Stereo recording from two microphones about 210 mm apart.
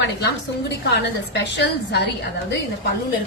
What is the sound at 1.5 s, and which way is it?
Speech, 55° left (ahead or behind).